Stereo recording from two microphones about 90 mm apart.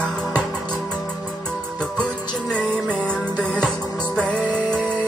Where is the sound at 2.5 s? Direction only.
10° left (ahead or behind).